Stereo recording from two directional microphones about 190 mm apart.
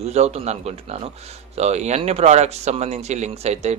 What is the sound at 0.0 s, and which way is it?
Speech, 35° right (ahead or behind).